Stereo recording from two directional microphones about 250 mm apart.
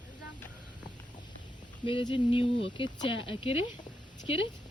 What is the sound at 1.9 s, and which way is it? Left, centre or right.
Speech, centre.